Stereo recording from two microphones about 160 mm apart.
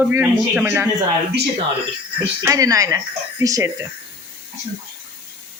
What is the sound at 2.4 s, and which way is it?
Speech, 20° right (ahead or behind).